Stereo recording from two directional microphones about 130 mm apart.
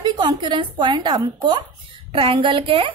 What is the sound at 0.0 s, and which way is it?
A woman's voice, 35° right (ahead or behind).